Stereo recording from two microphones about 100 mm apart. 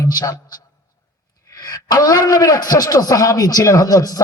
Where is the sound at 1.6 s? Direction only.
40° left (ahead or behind).